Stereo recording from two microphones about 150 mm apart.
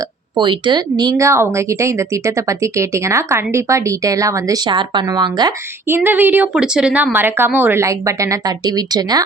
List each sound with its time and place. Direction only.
0.3 s speech: 30° right (ahead or behind)
5.9 s a woman's voice: 15° right (ahead or behind)